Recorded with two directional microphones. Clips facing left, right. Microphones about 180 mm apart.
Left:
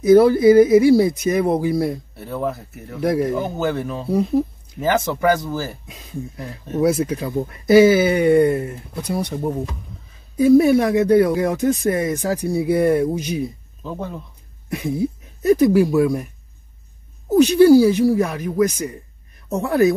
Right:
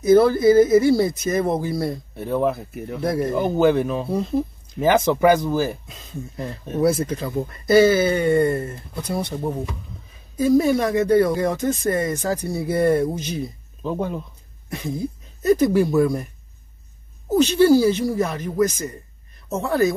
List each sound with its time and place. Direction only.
0.1 s speech: 15° left (ahead or behind)
2.1 s speech: 20° right (ahead or behind)
3.0 s speech: 15° left (ahead or behind)
3.5 s speech: 20° right (ahead or behind)
4.1 s speech: 5° left (ahead or behind)
4.7 s speech: 15° right (ahead or behind)
6.4 s speech: 10° left (ahead or behind)
8.9 s speech: centre (ahead or behind)
9.2 s speech: 15° left (ahead or behind)
13.8 s speech: 15° right (ahead or behind)
14.7 s speech: 15° left (ahead or behind)
17.4 s speech: 10° left (ahead or behind)